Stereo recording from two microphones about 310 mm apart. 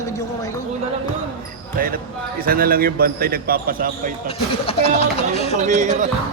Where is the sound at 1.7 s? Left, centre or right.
Right.